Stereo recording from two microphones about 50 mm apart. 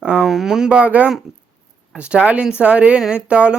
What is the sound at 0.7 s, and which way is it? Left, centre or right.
Speech, right.